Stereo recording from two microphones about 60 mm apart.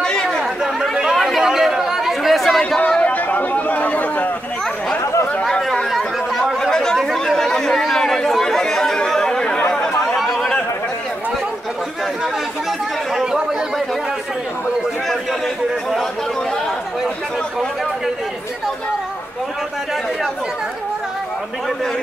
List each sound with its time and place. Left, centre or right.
0.0 s chatter: centre
1.1 s chatter: centre
3.0 s chatter: left
5.4 s a sound: centre
5.9 s chatter: centre
7.0 s chatter: centre
10.1 s chatter: centre
13.1 s speech: centre